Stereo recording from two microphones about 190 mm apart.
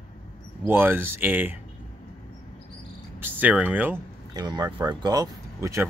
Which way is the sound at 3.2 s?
10° right (ahead or behind).